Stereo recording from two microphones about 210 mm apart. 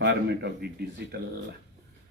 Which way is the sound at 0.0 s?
55° right (ahead or behind).